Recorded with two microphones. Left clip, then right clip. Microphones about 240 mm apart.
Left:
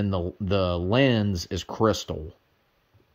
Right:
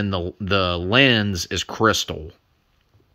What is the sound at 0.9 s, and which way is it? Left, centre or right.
Speech, right.